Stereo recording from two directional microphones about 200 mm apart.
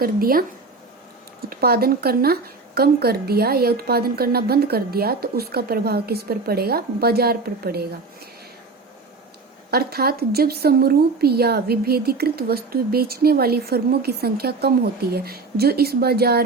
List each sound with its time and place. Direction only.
0.0 s speech: 45° right (ahead or behind)
1.5 s speech: 50° right (ahead or behind)
9.7 s speech: 50° right (ahead or behind)